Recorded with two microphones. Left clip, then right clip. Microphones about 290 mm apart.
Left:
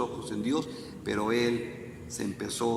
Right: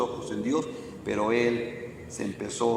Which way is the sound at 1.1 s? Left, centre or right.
Centre.